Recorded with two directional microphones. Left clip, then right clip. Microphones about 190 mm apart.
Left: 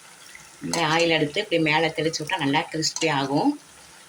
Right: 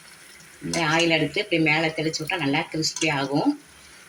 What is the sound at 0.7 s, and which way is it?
Speech, 65° left (ahead or behind).